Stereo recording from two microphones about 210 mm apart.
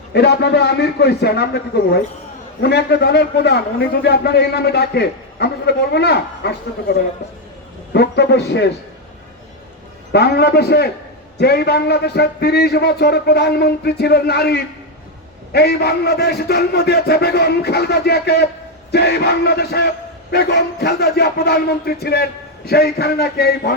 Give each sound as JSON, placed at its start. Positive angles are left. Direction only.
{"t": 0.1, "sound": "a man's voice", "side_deg": 50}
{"t": 7.9, "sound": "a man's voice", "side_deg": 55}
{"t": 10.1, "sound": "a man's voice", "side_deg": 50}